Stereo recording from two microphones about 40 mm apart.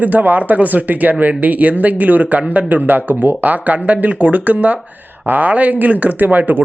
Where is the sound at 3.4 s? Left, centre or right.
Right.